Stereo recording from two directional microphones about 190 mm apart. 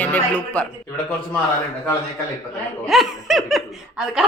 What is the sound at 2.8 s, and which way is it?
A man's voice, centre (ahead or behind).